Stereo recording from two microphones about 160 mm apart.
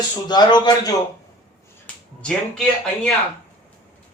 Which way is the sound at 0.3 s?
25° left (ahead or behind).